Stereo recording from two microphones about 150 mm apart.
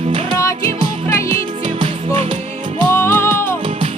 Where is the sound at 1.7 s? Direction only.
35° right (ahead or behind).